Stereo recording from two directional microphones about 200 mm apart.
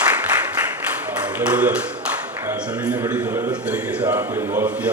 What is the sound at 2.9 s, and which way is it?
Speech, 20° right (ahead or behind).